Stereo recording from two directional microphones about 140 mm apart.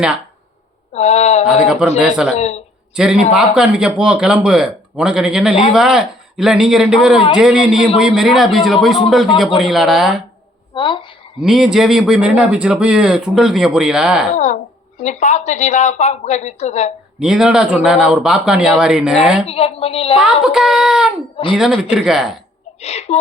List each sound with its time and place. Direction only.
0.9 s a woman's voice: 50° left (ahead or behind)
1.6 s speech: 5° right (ahead or behind)
2.3 s a woman's voice: 55° left (ahead or behind)
2.9 s a man's voice: 5° right (ahead or behind)
10.8 s speech: 35° left (ahead or behind)
11.4 s speech: 5° right (ahead or behind)
14.3 s a woman's voice: 60° left (ahead or behind)
17.2 s speech: 5° right (ahead or behind)
19.5 s a woman's voice: 45° left (ahead or behind)
20.1 s speech: 5° right (ahead or behind)
21.3 s speech: 35° left (ahead or behind)
21.6 s speech: 5° right (ahead or behind)
22.8 s a woman's voice: 50° left (ahead or behind)